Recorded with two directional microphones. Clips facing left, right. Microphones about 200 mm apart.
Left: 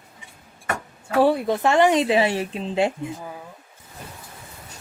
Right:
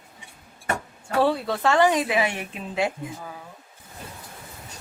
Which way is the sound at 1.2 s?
15° left (ahead or behind).